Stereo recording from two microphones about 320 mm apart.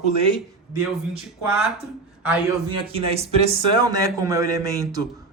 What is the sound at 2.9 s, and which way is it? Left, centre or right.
Speech, centre.